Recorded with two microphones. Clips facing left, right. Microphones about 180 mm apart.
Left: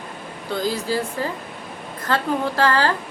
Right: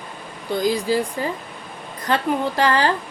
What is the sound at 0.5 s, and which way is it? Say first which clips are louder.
A woman's voice: right 3 dB; 15° right (ahead or behind).